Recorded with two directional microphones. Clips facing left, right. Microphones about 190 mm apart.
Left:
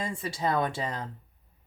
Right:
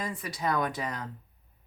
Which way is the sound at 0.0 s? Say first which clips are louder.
Left 2 dB; 25° left (ahead or behind).